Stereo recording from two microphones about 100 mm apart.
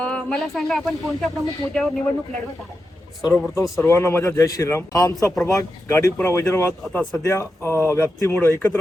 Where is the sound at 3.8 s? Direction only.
25° left (ahead or behind).